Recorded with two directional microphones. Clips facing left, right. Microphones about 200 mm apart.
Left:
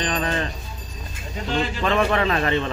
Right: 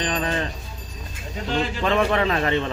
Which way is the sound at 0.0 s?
15° right (ahead or behind).